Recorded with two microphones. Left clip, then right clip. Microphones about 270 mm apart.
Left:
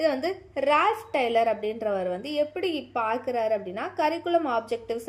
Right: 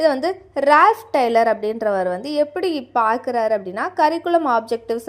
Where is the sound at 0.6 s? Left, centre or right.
Right.